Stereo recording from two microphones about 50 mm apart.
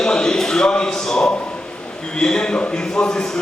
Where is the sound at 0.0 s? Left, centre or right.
Centre.